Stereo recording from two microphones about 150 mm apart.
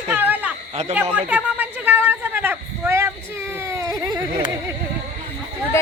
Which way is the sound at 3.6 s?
20° right (ahead or behind).